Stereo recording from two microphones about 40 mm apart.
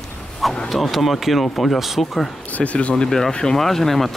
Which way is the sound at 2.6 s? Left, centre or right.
Left.